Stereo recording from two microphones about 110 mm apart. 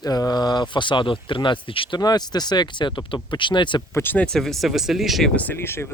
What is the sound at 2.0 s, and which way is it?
Speech, 40° left (ahead or behind).